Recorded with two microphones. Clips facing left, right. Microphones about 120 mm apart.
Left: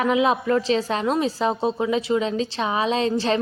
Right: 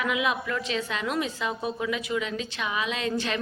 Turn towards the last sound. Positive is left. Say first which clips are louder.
# left 8 dB
turn(degrees=30)  # may be behind; listen again after turning